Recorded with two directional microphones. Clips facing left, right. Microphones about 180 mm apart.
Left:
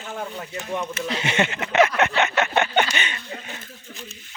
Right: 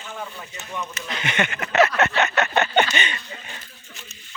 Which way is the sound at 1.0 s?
30° left (ahead or behind).